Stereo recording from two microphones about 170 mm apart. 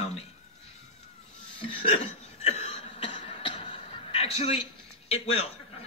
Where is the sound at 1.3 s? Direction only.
35° left (ahead or behind).